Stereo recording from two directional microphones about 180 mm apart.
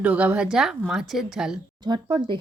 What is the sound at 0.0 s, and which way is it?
A woman's voice, 5° right (ahead or behind).